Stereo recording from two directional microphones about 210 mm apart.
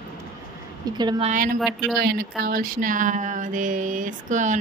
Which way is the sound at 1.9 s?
45° right (ahead or behind).